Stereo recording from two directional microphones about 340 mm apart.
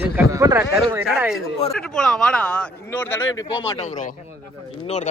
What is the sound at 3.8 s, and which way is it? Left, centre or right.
Speech, left.